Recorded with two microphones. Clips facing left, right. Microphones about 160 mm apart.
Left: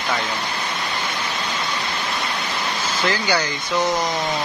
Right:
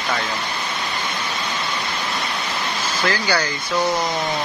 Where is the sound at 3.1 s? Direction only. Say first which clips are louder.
Even; 20° left (ahead or behind).